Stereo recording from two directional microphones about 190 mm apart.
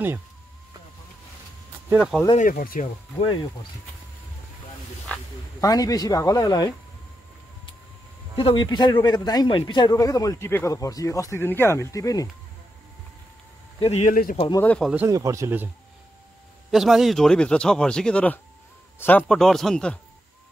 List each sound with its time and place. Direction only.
1.9 s speech: 5° right (ahead or behind)
2.3 s speech: 45° left (ahead or behind)
5.1 s snake: 10° left (ahead or behind)
5.6 s a man's voice: 20° left (ahead or behind)
8.4 s a man's voice: 25° left (ahead or behind)
13.7 s speech: 35° left (ahead or behind)
14.5 s speech: 10° left (ahead or behind)
14.9 s speech: 10° right (ahead or behind)
16.7 s speech: centre (ahead or behind)